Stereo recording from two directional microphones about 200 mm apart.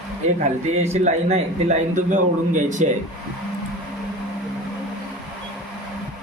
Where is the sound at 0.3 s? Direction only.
35° right (ahead or behind).